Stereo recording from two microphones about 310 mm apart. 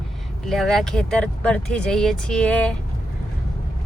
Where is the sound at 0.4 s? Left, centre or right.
Centre.